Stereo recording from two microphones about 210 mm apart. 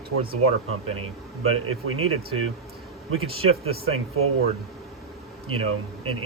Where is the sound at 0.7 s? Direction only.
90° right.